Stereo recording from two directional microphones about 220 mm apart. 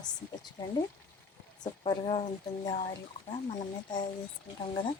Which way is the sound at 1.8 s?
25° left (ahead or behind).